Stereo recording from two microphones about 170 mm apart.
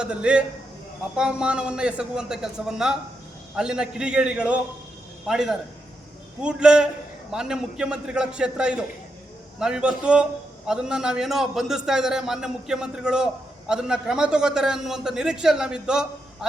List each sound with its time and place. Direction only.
0.0 s a man's voice: 5° right (ahead or behind)